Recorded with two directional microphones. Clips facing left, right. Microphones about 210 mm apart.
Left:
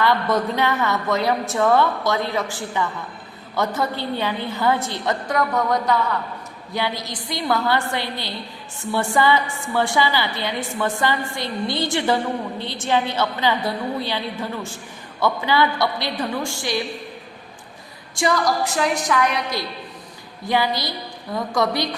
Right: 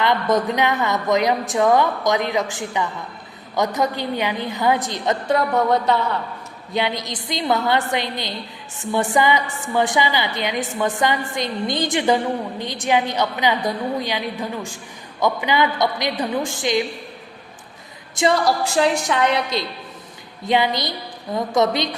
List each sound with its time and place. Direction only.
0.0 s a woman's voice: 20° right (ahead or behind)
5.3 s a woman's voice: 25° right (ahead or behind)
18.1 s a woman's voice: 25° right (ahead or behind)